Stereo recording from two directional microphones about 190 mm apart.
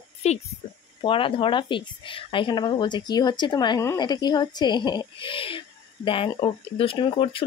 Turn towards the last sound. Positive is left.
turn(degrees=25)  # may be behind; listen again after turning